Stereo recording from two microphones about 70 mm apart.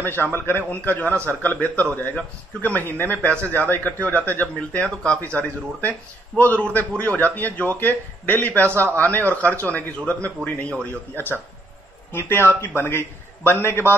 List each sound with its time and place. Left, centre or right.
0.0 s a man's voice: left